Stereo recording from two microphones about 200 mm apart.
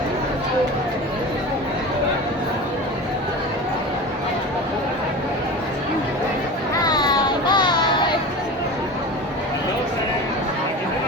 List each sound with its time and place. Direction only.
6.8 s baby cry: 20° left (ahead or behind)